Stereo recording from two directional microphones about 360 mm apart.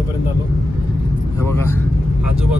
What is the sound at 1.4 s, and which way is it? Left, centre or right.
Speech, centre.